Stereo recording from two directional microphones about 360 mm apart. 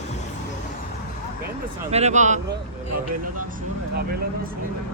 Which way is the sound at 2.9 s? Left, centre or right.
Right.